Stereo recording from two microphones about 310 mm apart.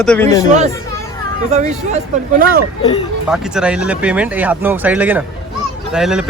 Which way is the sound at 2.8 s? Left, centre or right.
Centre.